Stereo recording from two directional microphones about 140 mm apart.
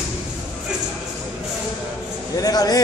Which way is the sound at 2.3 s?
25° left (ahead or behind).